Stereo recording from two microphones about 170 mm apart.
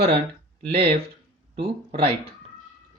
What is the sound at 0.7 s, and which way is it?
Speech, 35° right (ahead or behind).